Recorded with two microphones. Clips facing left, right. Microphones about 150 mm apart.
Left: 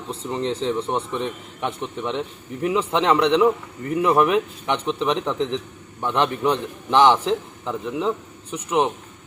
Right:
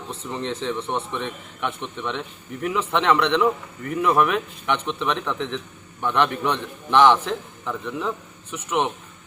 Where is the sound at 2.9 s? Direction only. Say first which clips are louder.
Left 1 dB; 35° left (ahead or behind).